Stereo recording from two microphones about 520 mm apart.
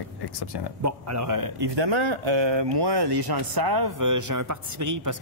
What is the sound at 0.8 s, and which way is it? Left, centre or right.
Speech, right.